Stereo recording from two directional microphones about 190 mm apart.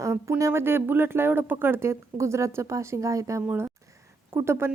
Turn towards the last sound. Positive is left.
turn(degrees=-15)  # may be behind; listen again after turning